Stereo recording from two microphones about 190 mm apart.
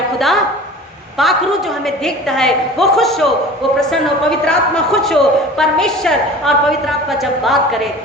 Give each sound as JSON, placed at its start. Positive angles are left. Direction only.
{"t": 0.2, "sound": "a woman's voice", "side_deg": 0}